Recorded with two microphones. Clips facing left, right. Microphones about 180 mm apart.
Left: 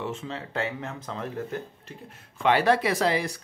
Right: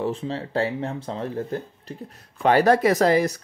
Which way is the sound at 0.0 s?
35° right (ahead or behind).